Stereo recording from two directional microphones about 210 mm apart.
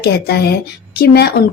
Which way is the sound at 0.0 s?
50° left (ahead or behind).